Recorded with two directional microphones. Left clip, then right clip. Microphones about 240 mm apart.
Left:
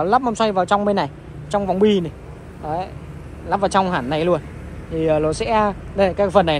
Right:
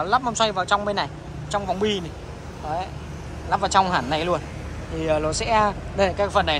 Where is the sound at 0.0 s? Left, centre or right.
Centre.